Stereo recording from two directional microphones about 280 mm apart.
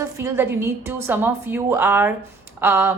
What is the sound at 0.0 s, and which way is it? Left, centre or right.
A woman's voice, centre.